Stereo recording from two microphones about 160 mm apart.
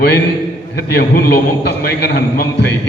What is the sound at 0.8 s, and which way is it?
A man's voice, 85° left.